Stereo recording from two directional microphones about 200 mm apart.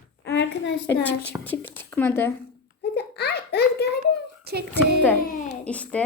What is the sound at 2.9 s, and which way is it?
Baby laughter, 55° left (ahead or behind).